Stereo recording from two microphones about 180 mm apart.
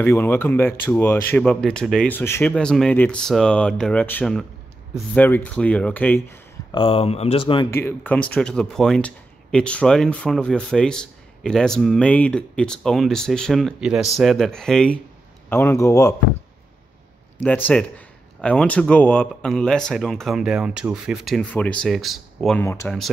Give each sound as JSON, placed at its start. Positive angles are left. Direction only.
{"t": 0.0, "sound": "speech", "side_deg": 10}
{"t": 6.7, "sound": "speech", "side_deg": 30}
{"t": 7.7, "sound": "speech", "side_deg": 10}
{"t": 15.5, "sound": "speech", "side_deg": 15}
{"t": 17.4, "sound": "speech", "side_deg": 10}
{"t": 22.6, "sound": "speech", "side_deg": 15}